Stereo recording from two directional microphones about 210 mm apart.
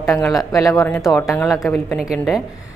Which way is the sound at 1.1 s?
5° left (ahead or behind).